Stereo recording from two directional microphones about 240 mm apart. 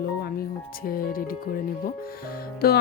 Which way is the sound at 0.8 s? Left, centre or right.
Left.